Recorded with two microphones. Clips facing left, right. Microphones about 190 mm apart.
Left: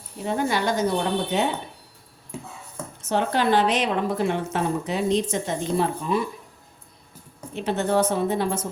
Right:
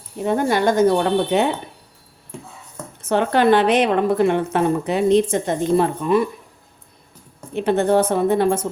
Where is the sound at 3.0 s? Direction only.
60° right (ahead or behind).